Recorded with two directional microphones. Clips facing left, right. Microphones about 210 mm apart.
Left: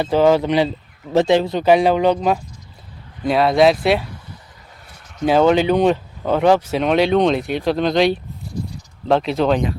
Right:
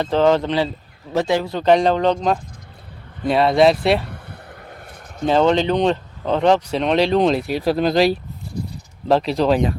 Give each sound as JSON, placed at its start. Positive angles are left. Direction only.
{"t": 0.0, "sound": "speech", "side_deg": 10}
{"t": 1.1, "sound": "speech", "side_deg": 25}
{"t": 1.6, "sound": "speech", "side_deg": 5}
{"t": 3.2, "sound": "speech", "side_deg": 0}
{"t": 4.0, "sound": "vehicle", "side_deg": -60}
{"t": 5.2, "sound": "speech", "side_deg": 10}